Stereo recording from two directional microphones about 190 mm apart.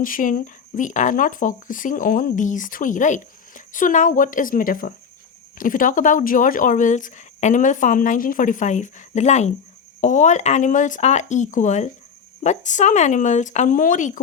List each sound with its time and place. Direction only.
0.0 s speech: 45° left (ahead or behind)